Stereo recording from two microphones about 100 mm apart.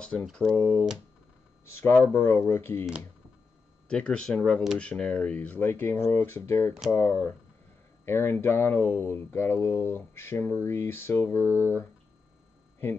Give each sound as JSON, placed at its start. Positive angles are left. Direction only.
{"t": 0.0, "sound": "speech", "side_deg": 10}
{"t": 1.7, "sound": "speech", "side_deg": 25}
{"t": 3.9, "sound": "speech", "side_deg": 10}